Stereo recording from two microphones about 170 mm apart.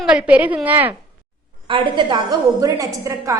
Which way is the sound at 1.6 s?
30° right (ahead or behind).